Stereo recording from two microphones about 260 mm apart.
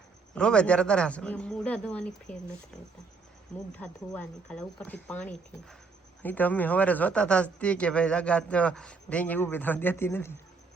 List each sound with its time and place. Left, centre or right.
0.3 s speech: centre
3.7 s speech: centre